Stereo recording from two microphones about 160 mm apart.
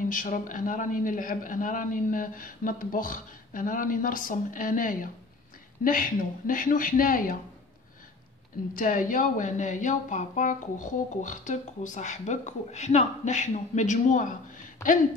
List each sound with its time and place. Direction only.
0.0 s a man's voice: 55° left (ahead or behind)
8.7 s speech: 55° left (ahead or behind)